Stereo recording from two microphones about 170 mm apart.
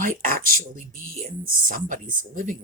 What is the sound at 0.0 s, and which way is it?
Speech, 55° right (ahead or behind).